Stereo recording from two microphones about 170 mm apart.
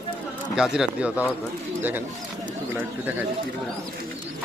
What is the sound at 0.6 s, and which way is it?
Speech, 5° right (ahead or behind).